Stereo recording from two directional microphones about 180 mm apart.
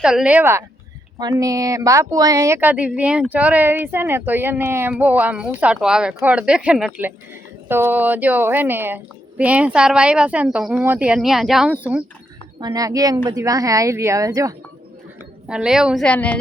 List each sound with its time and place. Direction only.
0.0 s speech: 5° right (ahead or behind)
12.5 s speech: 20° right (ahead or behind)
15.4 s a woman's voice: 5° right (ahead or behind)